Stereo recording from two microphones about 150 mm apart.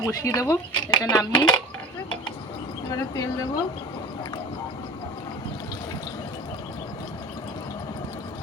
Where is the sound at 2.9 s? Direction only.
25° left (ahead or behind).